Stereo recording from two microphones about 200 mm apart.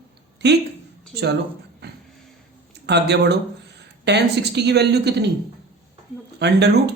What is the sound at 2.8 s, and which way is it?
Speech, 60° right (ahead or behind).